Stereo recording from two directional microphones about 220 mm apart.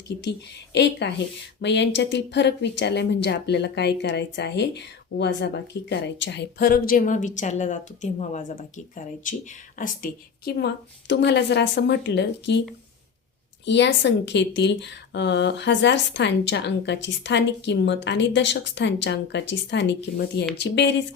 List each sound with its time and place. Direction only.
0.2 s a woman's voice: 50° left (ahead or behind)
13.7 s a woman's voice: 50° left (ahead or behind)